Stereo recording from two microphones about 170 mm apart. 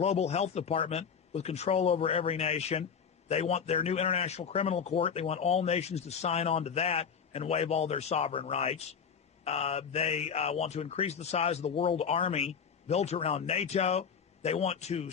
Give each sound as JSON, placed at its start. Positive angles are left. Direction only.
{"t": 0.0, "sound": "a man's voice", "side_deg": 40}